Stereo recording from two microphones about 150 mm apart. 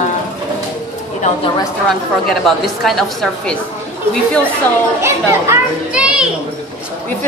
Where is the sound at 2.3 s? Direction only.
Centre (ahead or behind).